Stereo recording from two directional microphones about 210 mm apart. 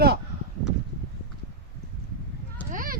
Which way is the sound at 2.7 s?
40° right (ahead or behind).